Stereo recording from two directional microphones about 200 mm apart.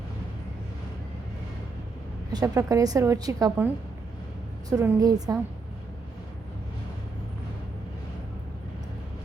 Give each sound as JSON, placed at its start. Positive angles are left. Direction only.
{"t": 2.3, "sound": "a woman's voice", "side_deg": -20}
{"t": 4.7, "sound": "a woman's voice", "side_deg": -15}